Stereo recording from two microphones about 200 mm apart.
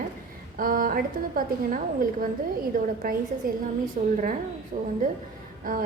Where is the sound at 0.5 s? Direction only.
45° right (ahead or behind).